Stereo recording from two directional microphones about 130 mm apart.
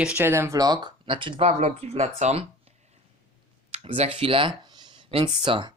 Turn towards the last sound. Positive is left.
turn(degrees=-35)  # may be behind; listen again after turning